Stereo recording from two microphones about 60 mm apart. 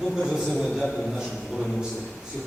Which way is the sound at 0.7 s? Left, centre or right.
Centre.